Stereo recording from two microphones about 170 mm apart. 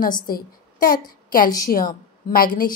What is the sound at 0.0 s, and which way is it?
A woman's voice, 55° left (ahead or behind).